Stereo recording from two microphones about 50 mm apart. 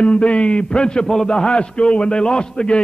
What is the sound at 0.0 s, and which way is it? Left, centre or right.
A man's voice, left.